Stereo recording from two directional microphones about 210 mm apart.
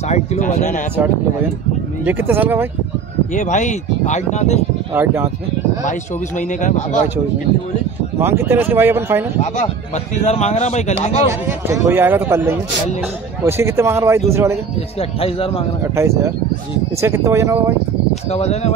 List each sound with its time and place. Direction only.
0.1 s speech: 30° left (ahead or behind)
2.0 s a man's voice: 10° right (ahead or behind)
3.3 s speech: 35° left (ahead or behind)
4.9 s a man's voice: 10° right (ahead or behind)
5.9 s speech: 35° left (ahead or behind)
8.2 s a man's voice: 10° right (ahead or behind)
10.1 s speech: 30° left (ahead or behind)
11.4 s a man's voice: 10° right (ahead or behind)
15.0 s speech: 25° left (ahead or behind)
15.8 s a man's voice: 15° right (ahead or behind)
18.3 s speech: 30° left (ahead or behind)